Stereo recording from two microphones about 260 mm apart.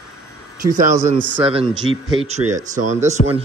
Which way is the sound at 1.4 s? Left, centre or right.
Right.